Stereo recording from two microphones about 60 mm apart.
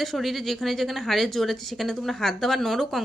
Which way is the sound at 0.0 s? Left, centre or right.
Centre.